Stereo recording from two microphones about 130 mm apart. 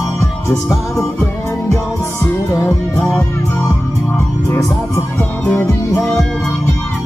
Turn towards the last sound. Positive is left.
turn(degrees=20)  # may be behind; listen again after turning